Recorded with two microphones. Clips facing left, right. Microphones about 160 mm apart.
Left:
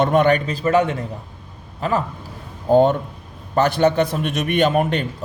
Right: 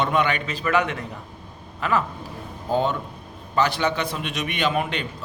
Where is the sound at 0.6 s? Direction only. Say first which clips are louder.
Left 4 dB; 35° left (ahead or behind).